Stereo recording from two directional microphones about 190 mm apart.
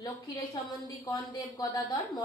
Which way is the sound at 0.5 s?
20° left (ahead or behind).